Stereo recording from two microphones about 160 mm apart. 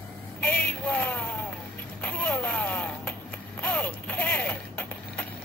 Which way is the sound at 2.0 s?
10° left (ahead or behind).